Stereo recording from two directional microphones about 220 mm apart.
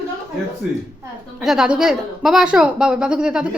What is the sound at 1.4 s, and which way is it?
A woman's voice, centre (ahead or behind).